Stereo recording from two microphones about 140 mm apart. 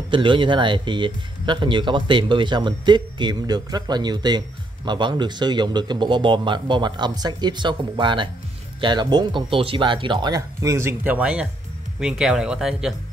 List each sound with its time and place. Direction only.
0.1 s speech: 35° right (ahead or behind); by 12.9 s 5° right (ahead or behind)